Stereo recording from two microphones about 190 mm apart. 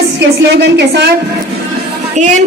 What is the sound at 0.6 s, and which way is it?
Speech, 65° right (ahead or behind).